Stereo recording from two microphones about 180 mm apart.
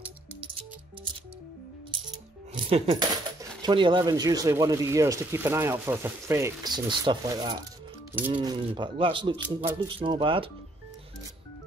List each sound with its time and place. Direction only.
2.5 s coin: 35° right (ahead or behind)
3.0 s speech: 20° right (ahead or behind)